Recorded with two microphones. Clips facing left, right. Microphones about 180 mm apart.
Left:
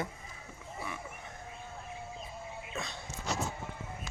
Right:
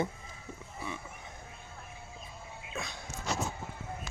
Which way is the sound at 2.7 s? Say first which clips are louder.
Right 1 dB; centre (ahead or behind).